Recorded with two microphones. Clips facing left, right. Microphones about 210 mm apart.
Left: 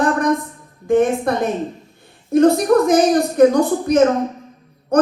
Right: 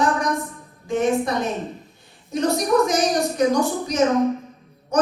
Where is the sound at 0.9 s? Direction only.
55° left (ahead or behind).